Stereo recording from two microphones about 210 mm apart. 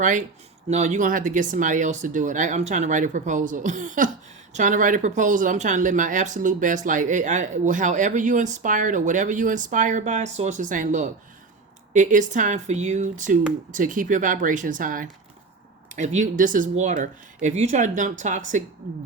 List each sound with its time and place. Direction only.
0.0 s speech: 40° right (ahead or behind)